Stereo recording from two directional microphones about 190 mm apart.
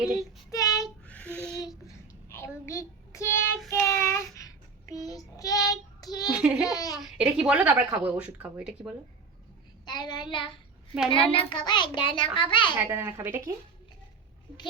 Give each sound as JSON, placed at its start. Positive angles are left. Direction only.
{"t": 0.2, "sound": "child singing", "side_deg": 15}
{"t": 2.3, "sound": "a child's voice", "side_deg": 15}
{"t": 3.7, "sound": "child singing", "side_deg": 15}
{"t": 6.3, "sound": "speech", "side_deg": -5}
{"t": 6.7, "sound": "speech", "side_deg": 20}
{"t": 7.0, "sound": "speech", "side_deg": -5}
{"t": 9.8, "sound": "child singing", "side_deg": 20}
{"t": 11.1, "sound": "a child's voice", "side_deg": 30}
{"t": 12.8, "sound": "speech", "side_deg": -15}